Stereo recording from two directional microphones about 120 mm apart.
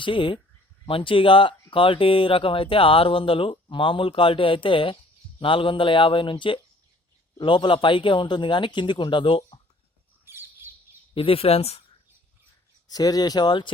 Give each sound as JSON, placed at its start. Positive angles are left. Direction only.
{"t": 0.0, "sound": "speech", "side_deg": 45}
{"t": 10.2, "sound": "bird", "side_deg": -20}
{"t": 11.1, "sound": "speech", "side_deg": 50}
{"t": 12.9, "sound": "speech", "side_deg": 30}